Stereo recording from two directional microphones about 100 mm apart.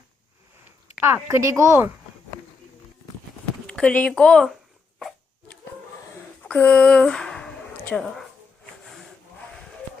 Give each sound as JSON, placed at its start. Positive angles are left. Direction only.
{"t": 1.0, "sound": "speech", "side_deg": -25}
{"t": 3.7, "sound": "speech", "side_deg": 10}
{"t": 6.4, "sound": "a sound", "side_deg": 15}